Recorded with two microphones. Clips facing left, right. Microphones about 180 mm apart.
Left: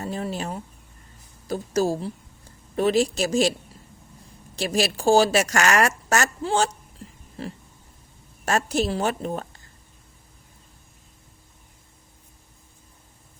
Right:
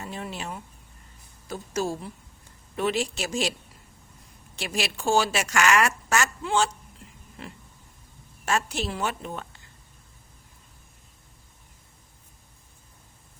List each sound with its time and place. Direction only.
0.0 s a sound: 40° left (ahead or behind)
1.5 s speech: 35° left (ahead or behind)
4.5 s speech: 40° left (ahead or behind)
8.4 s speech: 40° left (ahead or behind)